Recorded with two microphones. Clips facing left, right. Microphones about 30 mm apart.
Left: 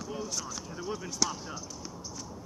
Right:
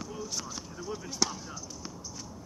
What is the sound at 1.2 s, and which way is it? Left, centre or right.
Speech, centre.